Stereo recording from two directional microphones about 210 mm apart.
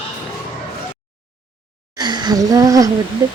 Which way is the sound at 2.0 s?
20° right (ahead or behind).